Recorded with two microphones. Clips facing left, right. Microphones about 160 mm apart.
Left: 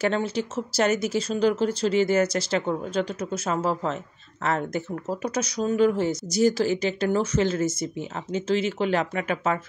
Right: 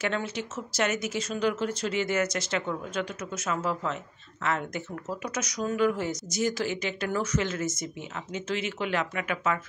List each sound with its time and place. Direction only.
0.0 s speech: 35° left (ahead or behind)